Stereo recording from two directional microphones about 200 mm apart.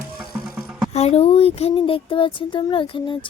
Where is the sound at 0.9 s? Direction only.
30° left (ahead or behind).